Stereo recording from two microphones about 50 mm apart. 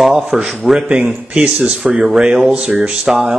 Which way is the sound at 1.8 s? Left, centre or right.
Centre.